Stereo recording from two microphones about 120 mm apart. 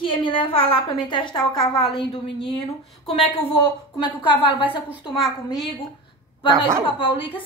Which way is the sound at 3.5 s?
40° left (ahead or behind).